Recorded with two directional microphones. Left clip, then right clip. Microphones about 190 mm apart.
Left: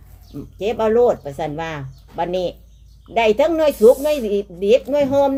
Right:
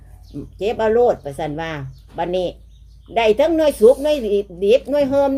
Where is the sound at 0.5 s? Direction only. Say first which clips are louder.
Even; centre (ahead or behind).